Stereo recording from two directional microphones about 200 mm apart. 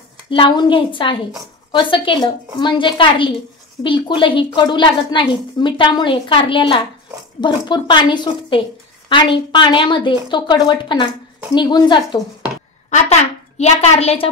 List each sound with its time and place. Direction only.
0.3 s a woman's voice: 25° left (ahead or behind)
12.9 s a woman's voice: 30° left (ahead or behind)